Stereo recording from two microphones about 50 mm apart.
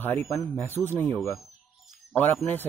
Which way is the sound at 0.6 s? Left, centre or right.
Left.